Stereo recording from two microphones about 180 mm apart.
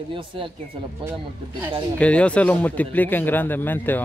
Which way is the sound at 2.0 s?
5° left (ahead or behind).